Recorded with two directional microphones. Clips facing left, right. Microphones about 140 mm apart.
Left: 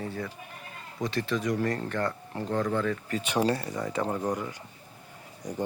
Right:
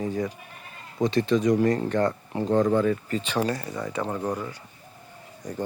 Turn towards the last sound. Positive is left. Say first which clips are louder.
# right 1 dB
turn(degrees=10)  # may be behind; listen again after turning